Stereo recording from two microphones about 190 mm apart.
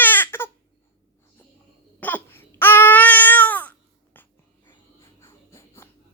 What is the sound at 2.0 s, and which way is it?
Babbling, 10° left (ahead or behind).